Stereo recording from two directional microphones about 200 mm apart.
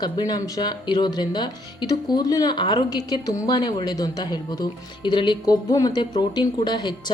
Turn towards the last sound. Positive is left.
turn(degrees=20)  # may be behind; listen again after turning